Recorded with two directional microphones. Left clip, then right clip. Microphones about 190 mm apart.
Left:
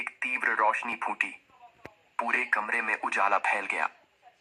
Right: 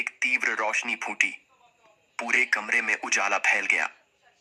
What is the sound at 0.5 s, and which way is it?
Speech, 45° right (ahead or behind).